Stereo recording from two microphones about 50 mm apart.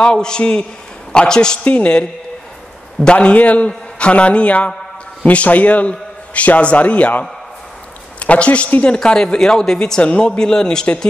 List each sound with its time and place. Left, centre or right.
0.0 s a man's voice: centre
1.6 s a man's voice: left
8.8 s a man's voice: centre